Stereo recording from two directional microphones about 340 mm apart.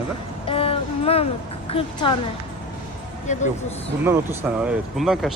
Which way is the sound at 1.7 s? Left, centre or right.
Centre.